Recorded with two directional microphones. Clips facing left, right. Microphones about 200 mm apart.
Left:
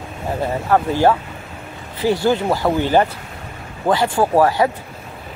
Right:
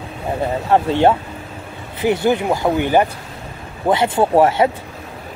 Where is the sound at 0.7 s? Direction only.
25° right (ahead or behind).